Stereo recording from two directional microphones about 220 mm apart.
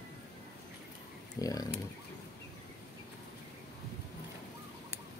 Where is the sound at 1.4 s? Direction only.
15° left (ahead or behind).